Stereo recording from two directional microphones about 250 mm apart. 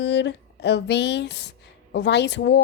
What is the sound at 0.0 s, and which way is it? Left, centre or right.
Speech, left.